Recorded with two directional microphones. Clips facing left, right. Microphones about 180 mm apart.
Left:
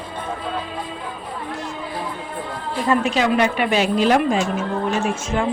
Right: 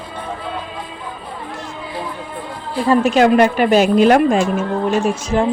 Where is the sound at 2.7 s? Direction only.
30° right (ahead or behind).